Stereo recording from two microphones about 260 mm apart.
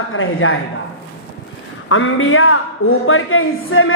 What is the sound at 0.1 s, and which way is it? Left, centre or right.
Speech, left.